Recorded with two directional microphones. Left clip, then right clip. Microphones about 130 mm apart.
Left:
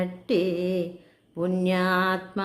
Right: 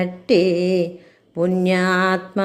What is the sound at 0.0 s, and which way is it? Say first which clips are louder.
Music: right 8 dB; 25° right (ahead or behind).